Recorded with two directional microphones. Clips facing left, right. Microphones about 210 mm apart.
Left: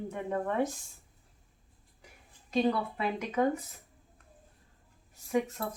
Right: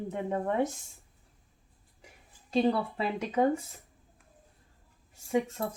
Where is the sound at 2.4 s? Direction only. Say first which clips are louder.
Right 2 dB; 30° right (ahead or behind).